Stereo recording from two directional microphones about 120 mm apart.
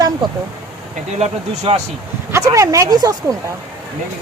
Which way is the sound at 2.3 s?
25° right (ahead or behind).